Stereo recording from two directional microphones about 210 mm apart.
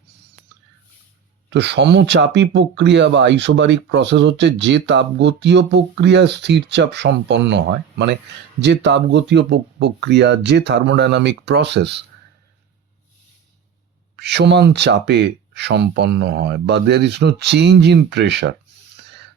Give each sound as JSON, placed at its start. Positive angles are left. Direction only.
{"t": 1.5, "sound": "speech", "side_deg": -55}
{"t": 14.2, "sound": "speech", "side_deg": -55}